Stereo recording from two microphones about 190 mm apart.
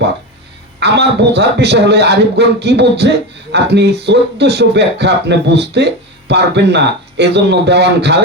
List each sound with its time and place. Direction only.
0.8 s speech: 65° right (ahead or behind)